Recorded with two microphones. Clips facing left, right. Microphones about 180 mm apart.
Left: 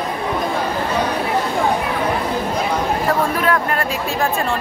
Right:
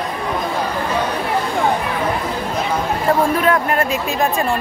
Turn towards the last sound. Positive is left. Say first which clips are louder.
# right 2 dB
turn(degrees=-20)  # may be behind; listen again after turning